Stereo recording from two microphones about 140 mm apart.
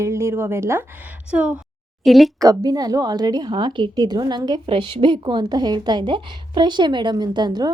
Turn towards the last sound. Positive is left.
turn(degrees=-30)  # may be behind; listen again after turning